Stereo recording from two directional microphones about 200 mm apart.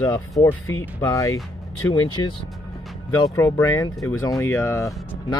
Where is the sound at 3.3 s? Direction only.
15° left (ahead or behind).